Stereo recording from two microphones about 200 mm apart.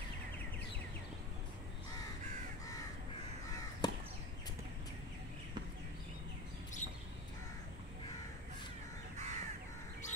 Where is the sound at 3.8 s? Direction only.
20° left (ahead or behind).